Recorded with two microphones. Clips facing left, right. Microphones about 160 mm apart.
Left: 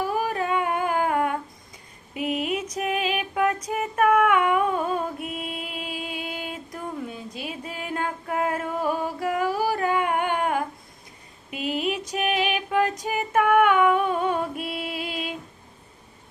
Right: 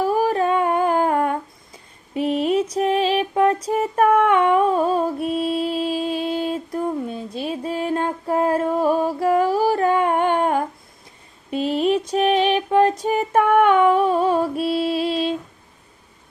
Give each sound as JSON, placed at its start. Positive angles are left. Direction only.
{"t": 0.2, "sound": "humming", "side_deg": -35}
{"t": 2.1, "sound": "music", "side_deg": -35}
{"t": 7.4, "sound": "a sound", "side_deg": -35}
{"t": 9.7, "sound": "humming", "side_deg": -35}
{"t": 11.5, "sound": "a sound", "side_deg": -35}
{"t": 12.5, "sound": "female singing", "side_deg": -30}